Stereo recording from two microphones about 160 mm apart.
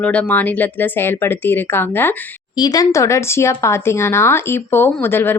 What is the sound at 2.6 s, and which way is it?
Speech, 25° left (ahead or behind).